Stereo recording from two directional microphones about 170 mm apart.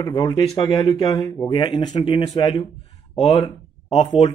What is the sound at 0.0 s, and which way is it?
Speech, 25° left (ahead or behind).